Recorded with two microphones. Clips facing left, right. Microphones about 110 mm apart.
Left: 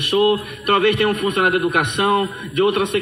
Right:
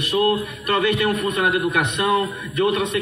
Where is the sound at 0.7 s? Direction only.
65° left (ahead or behind).